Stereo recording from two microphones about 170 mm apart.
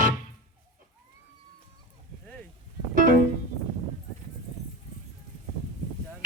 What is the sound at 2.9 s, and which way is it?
Music, 50° right (ahead or behind).